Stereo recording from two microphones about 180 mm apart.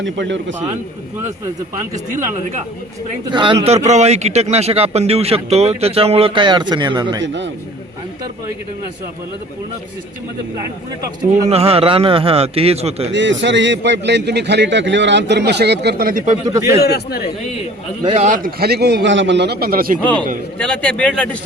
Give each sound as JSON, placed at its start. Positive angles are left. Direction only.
{"t": 0.0, "sound": "speech", "side_deg": -90}
{"t": 3.2, "sound": "a man's voice", "side_deg": -25}
{"t": 7.2, "sound": "speech", "side_deg": -85}
{"t": 11.4, "sound": "a man's voice", "side_deg": -35}
{"t": 13.1, "sound": "a man's voice", "side_deg": -90}
{"t": 16.5, "sound": "a man's voice", "side_deg": -15}
{"t": 16.8, "sound": "a man's voice", "side_deg": 60}
{"t": 18.1, "sound": "a man's voice", "side_deg": -40}
{"t": 20.0, "sound": "a man's voice", "side_deg": 10}